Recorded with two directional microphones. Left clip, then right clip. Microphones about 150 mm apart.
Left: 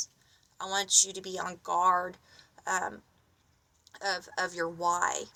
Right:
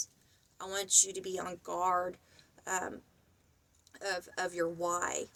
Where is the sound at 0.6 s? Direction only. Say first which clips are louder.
Left 4 dB; 25° right (ahead or behind).